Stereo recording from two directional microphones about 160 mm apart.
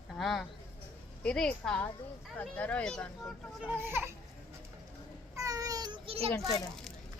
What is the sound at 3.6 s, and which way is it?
Speech, 15° right (ahead or behind).